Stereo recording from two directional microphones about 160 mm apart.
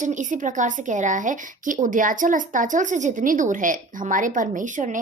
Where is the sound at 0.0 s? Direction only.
50° right (ahead or behind).